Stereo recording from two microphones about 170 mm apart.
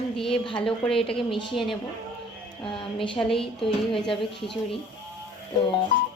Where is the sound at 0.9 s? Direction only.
30° left (ahead or behind).